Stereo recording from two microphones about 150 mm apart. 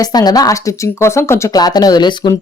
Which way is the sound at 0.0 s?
25° left (ahead or behind).